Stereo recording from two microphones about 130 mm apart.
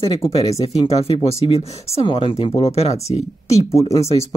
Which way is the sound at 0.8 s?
50° left (ahead or behind).